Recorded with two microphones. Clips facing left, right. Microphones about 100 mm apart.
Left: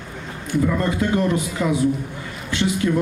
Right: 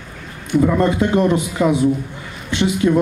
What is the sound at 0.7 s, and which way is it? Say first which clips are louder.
Speech: right 5 dB; 20° right (ahead or behind).